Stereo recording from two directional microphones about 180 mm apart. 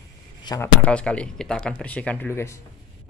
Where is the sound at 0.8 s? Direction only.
5° left (ahead or behind).